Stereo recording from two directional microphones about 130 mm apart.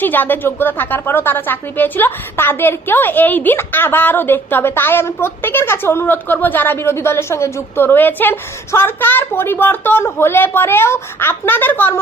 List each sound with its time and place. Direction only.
0.0 s a woman's voice: 15° left (ahead or behind)